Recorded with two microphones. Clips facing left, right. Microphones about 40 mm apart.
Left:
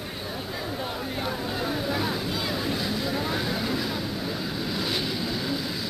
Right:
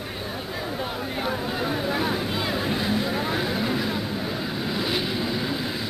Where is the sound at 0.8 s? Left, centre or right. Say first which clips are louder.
Right 2 dB; centre.